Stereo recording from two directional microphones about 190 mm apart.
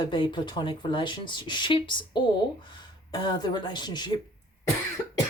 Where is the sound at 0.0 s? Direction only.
25° left (ahead or behind).